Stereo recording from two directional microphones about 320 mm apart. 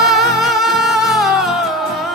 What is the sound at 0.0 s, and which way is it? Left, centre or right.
Music, centre.